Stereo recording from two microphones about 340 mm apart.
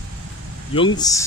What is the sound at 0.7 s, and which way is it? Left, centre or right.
Speech, centre.